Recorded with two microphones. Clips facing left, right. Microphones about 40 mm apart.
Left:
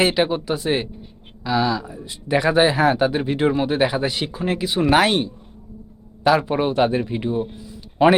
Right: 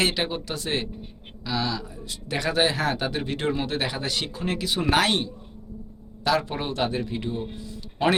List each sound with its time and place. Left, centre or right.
0.0 s speech: centre